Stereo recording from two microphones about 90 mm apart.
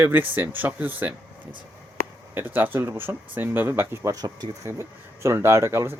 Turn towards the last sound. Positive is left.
turn(degrees=-30)  # may be behind; listen again after turning